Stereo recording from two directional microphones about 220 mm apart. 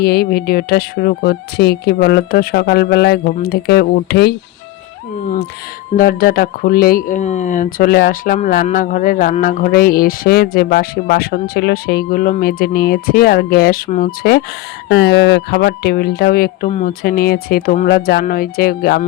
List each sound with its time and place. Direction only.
0.0 s speech: 45° left (ahead or behind)
6.0 s speech: 40° left (ahead or behind)